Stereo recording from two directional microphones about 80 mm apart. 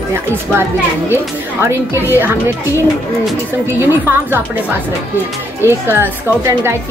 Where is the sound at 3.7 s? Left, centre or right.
Right.